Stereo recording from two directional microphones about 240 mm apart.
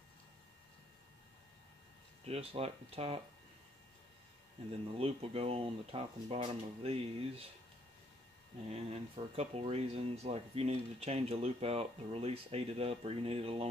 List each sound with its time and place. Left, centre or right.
2.2 s speech: right
4.9 s speech: right
8.6 s speech: right